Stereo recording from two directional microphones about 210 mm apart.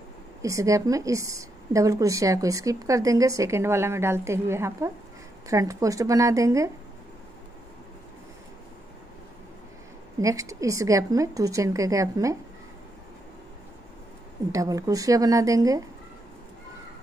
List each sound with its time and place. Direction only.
0.4 s a woman's voice: 15° right (ahead or behind)
10.2 s a woman's voice: 15° right (ahead or behind)
14.5 s a woman's voice: 15° right (ahead or behind)